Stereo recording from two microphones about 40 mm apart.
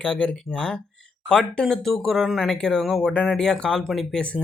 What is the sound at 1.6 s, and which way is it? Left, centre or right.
Speech, centre.